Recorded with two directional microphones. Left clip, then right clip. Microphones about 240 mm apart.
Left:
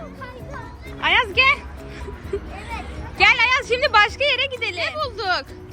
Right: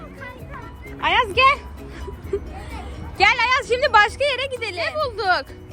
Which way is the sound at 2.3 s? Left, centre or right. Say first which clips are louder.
Even; centre.